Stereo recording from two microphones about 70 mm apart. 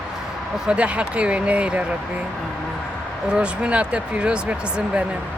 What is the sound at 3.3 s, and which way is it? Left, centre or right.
Speech, centre.